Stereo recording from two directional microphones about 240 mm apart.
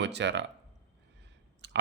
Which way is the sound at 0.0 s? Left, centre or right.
Right.